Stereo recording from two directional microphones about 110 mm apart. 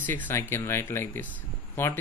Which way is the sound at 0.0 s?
15° left (ahead or behind).